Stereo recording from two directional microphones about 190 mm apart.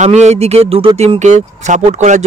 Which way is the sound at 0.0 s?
35° right (ahead or behind).